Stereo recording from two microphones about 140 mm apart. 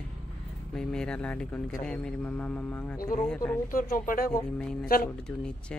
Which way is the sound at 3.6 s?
80° left.